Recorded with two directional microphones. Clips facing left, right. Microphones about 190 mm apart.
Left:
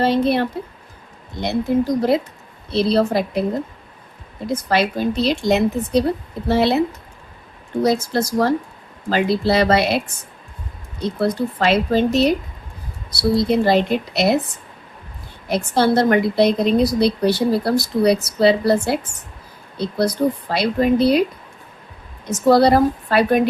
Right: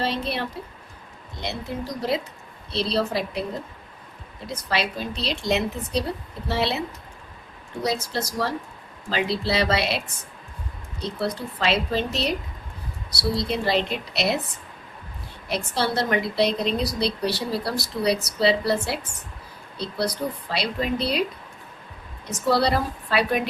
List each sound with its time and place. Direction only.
0.0 s a woman's voice: 50° left (ahead or behind)
2.0 s a woman's voice: 50° left (ahead or behind)
4.4 s a woman's voice: 50° left (ahead or behind)
11.0 s a woman's voice: 50° left (ahead or behind)
15.4 s a woman's voice: 50° left (ahead or behind)
22.3 s a woman's voice: 45° left (ahead or behind)